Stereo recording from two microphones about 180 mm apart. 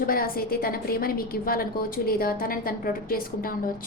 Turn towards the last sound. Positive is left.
turn(degrees=50)  # may be behind; listen again after turning